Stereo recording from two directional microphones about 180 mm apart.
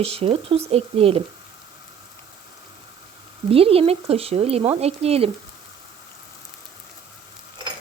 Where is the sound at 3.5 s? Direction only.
30° right (ahead or behind).